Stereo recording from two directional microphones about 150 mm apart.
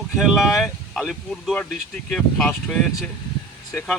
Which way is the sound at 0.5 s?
Centre (ahead or behind).